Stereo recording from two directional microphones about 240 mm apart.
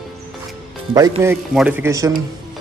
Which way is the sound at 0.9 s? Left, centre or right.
Centre.